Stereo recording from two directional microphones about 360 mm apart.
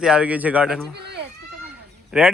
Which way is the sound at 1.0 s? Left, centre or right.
Right.